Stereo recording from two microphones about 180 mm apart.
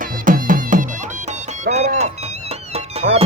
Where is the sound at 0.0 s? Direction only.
50° right (ahead or behind).